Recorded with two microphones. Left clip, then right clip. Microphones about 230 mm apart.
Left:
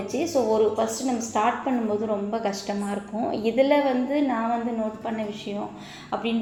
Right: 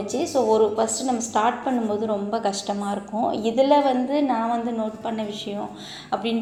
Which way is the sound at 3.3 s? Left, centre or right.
Centre.